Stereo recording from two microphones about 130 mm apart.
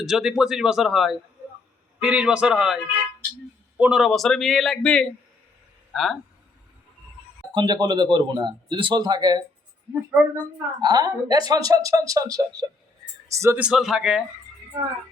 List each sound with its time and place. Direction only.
0.0 s a man's voice: 5° right (ahead or behind)
7.5 s speech: 35° right (ahead or behind)
9.9 s a man's voice: 10° right (ahead or behind)
10.3 s a woman's voice: 30° right (ahead or behind)
13.6 s a man's voice: 5° right (ahead or behind)